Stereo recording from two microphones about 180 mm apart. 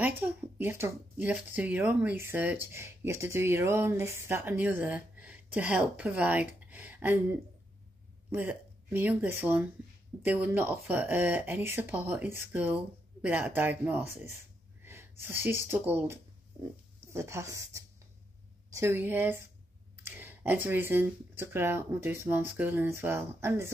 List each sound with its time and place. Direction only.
0.0 s speech: 10° right (ahead or behind)